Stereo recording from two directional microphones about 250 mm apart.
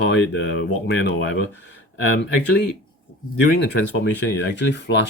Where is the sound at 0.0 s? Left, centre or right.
Left.